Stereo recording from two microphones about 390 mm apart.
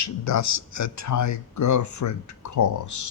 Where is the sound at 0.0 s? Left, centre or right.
Left.